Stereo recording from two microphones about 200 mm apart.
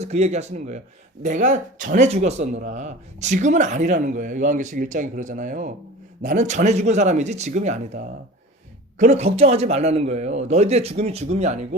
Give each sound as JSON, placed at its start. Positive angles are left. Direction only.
{"t": 0.0, "sound": "speech", "side_deg": -35}